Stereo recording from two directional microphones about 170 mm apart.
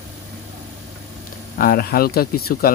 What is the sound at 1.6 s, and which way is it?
Speech, 60° left (ahead or behind).